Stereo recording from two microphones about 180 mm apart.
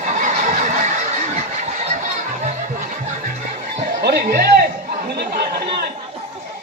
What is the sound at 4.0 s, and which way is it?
Chatter, 60° right (ahead or behind).